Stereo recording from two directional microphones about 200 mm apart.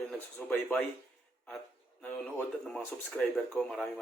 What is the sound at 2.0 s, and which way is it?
Speech, 10° left (ahead or behind).